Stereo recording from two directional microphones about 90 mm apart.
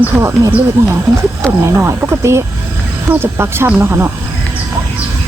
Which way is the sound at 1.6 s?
30° right (ahead or behind).